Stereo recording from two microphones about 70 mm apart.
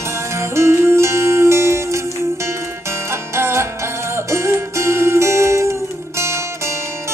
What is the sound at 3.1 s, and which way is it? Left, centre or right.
Music, right.